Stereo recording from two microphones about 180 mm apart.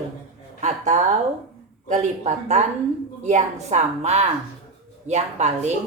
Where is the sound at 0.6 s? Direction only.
40° right (ahead or behind).